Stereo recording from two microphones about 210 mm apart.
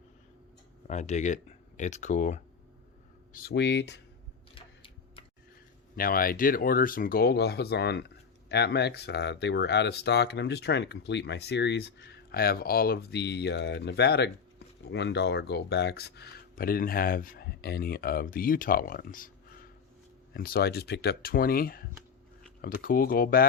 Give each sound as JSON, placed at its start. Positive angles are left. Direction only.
{"t": 0.9, "sound": "speech", "side_deg": 35}
{"t": 3.3, "sound": "speech", "side_deg": 50}
{"t": 4.5, "sound": "a sound", "side_deg": 25}
{"t": 6.0, "sound": "speech", "side_deg": 45}